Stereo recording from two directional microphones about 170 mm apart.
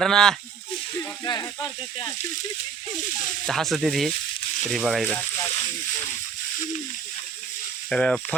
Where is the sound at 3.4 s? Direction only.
Centre (ahead or behind).